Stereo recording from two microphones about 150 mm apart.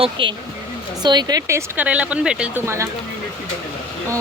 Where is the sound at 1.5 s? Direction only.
15° right (ahead or behind).